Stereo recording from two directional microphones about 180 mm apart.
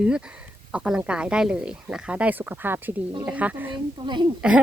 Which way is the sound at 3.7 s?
25° right (ahead or behind).